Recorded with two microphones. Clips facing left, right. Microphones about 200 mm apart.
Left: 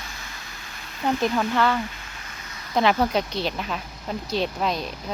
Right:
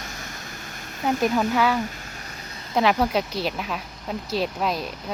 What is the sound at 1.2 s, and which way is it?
Speech, 10° right (ahead or behind).